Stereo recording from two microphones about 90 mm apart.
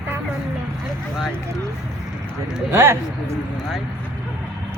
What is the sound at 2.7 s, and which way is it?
Speech, 25° right (ahead or behind).